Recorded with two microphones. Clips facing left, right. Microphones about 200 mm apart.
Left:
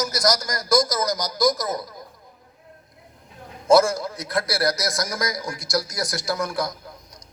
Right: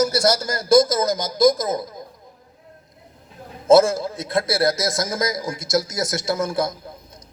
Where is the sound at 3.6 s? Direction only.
25° right (ahead or behind).